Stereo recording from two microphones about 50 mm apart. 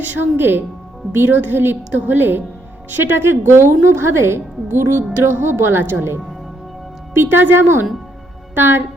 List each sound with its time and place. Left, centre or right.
0.2 s a woman's voice: right